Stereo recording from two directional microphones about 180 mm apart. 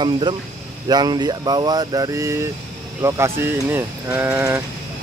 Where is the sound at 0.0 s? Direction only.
25° right (ahead or behind).